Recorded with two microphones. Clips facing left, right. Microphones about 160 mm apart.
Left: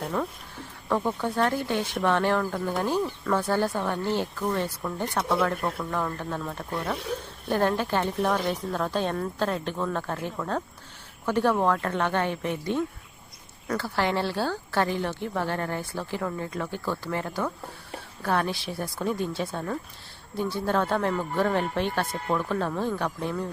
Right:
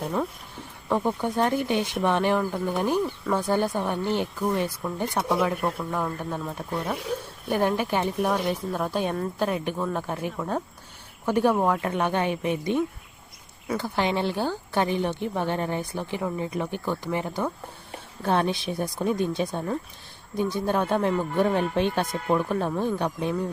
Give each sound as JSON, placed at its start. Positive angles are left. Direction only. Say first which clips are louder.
{"t": 0.0, "sound": "speech", "louder": "right 2 dB", "side_deg": -10}